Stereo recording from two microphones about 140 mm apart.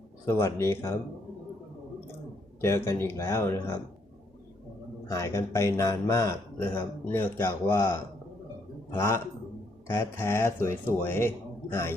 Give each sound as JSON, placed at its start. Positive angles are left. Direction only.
{"t": 0.3, "sound": "a man's voice", "side_deg": 15}
{"t": 2.6, "sound": "a man's voice", "side_deg": 20}
{"t": 5.0, "sound": "a man's voice", "side_deg": 20}